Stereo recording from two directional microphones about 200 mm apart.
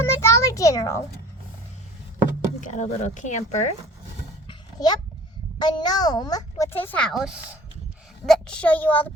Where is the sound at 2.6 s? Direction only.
40° left (ahead or behind).